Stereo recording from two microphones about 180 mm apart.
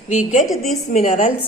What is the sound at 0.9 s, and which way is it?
Speech, 45° left (ahead or behind).